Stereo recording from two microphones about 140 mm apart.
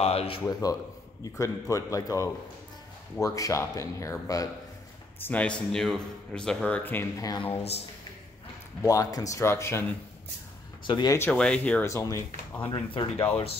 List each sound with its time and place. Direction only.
0.0 s speech: 45° left (ahead or behind)
0.4 s speech: 25° left (ahead or behind)
5.2 s a man's voice: 10° left (ahead or behind)
7.2 s speech: 25° left (ahead or behind)
8.8 s speech: 25° left (ahead or behind)
10.9 s speech: 30° left (ahead or behind)
11.1 s a man's voice: 10° left (ahead or behind)
11.8 s speech: 25° left (ahead or behind)
12.6 s speech: 40° left (ahead or behind)